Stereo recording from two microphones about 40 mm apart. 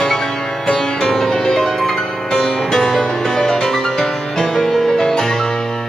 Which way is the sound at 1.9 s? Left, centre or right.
Centre.